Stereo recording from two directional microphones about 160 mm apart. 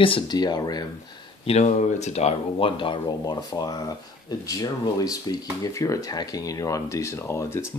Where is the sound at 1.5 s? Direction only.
45° left (ahead or behind).